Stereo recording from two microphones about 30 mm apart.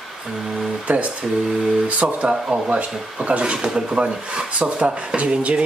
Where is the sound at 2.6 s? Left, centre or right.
Right.